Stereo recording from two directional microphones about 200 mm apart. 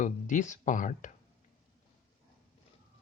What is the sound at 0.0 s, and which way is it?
Speech, 40° left (ahead or behind).